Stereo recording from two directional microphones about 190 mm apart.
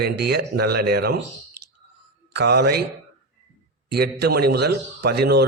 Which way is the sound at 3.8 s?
60° right (ahead or behind).